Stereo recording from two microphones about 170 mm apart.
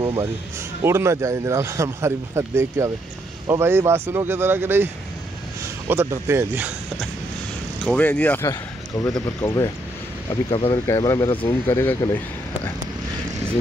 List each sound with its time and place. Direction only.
0.0 s speech: 25° right (ahead or behind)
7.8 s speech: 10° left (ahead or behind)
10.5 s speech: 30° left (ahead or behind)
10.9 s speech: 20° left (ahead or behind)